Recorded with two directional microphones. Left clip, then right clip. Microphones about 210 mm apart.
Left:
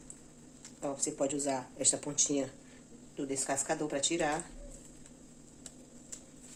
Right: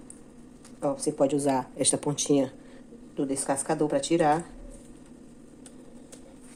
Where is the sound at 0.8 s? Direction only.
35° right (ahead or behind).